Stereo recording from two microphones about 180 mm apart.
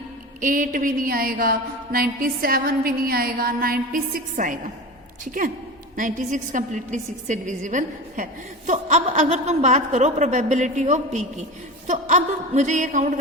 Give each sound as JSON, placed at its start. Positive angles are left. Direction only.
{"t": 0.4, "sound": "a woman's voice", "side_deg": -50}